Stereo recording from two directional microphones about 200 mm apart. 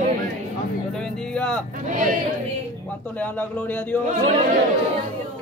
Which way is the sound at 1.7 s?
40° right (ahead or behind).